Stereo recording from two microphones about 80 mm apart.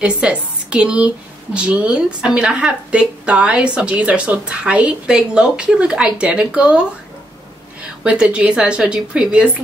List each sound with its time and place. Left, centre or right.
0.2 s a woman's voice: centre
8.0 s a woman's voice: centre